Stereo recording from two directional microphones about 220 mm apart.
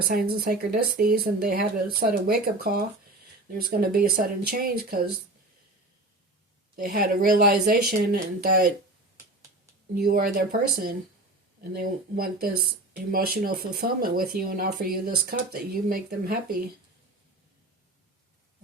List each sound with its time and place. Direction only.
0.0 s speech: 45° right (ahead or behind)
6.7 s speech: 40° right (ahead or behind)
9.9 s speech: 45° right (ahead or behind)
11.7 s speech: 45° right (ahead or behind)